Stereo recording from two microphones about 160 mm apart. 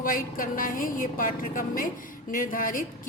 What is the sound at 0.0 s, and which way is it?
A woman's voice, 60° left (ahead or behind).